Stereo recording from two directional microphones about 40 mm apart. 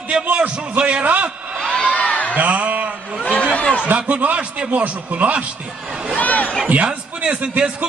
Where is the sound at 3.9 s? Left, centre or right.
Right.